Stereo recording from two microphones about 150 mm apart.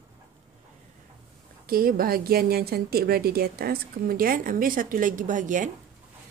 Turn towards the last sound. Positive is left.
turn(degrees=-60)  # may be behind; listen again after turning